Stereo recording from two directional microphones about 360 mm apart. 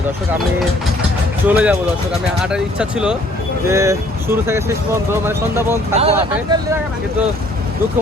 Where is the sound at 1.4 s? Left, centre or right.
Centre.